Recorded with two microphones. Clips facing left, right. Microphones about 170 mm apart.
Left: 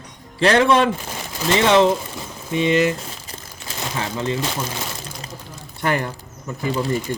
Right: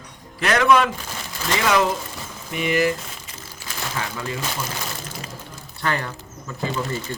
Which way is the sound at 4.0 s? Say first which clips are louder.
Left 6 dB; 30° left (ahead or behind).